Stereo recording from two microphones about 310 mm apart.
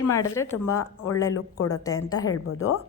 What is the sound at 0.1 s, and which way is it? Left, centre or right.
Speech, centre.